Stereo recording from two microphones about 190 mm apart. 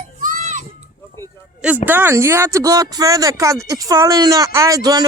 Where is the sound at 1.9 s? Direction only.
10° right (ahead or behind).